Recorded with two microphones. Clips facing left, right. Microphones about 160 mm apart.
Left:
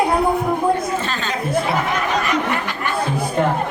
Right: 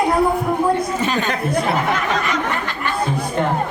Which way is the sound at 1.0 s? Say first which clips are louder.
Right 5 dB; 15° right (ahead or behind).